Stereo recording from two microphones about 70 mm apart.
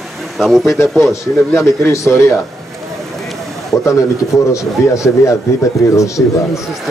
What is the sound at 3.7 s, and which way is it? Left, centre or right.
Speech, left.